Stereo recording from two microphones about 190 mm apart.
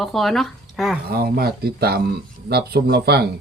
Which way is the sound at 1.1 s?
55° right (ahead or behind).